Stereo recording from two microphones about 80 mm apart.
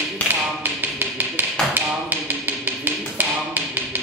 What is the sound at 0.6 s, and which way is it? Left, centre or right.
Tap, right.